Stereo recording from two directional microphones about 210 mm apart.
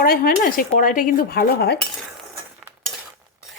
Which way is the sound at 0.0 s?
45° left (ahead or behind).